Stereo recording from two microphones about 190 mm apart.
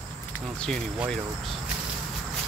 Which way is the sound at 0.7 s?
5° left (ahead or behind).